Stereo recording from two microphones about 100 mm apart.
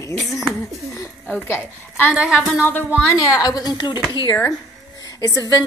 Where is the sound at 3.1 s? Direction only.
30° left (ahead or behind).